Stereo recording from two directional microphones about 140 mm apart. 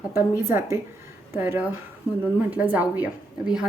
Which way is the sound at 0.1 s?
15° right (ahead or behind).